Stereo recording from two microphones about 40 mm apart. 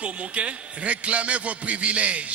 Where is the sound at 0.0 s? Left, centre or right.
Right.